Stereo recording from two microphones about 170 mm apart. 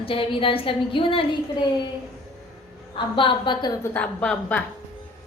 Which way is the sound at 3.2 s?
30° left (ahead or behind).